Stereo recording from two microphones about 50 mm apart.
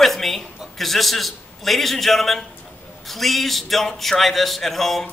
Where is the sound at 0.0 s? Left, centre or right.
Centre.